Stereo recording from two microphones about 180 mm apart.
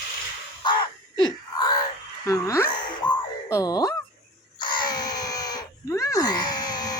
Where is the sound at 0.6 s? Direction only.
25° left (ahead or behind).